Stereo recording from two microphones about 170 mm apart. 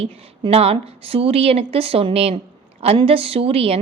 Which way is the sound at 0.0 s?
35° right (ahead or behind).